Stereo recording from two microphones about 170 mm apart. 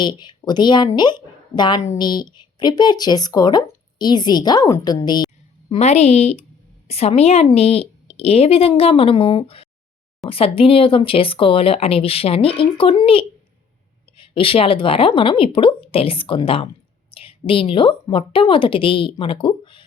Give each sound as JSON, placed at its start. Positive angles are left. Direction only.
{"t": 0.0, "sound": "a woman's voice", "side_deg": 25}